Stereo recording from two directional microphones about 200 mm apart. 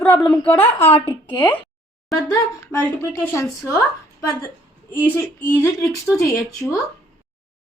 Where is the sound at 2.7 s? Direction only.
15° left (ahead or behind).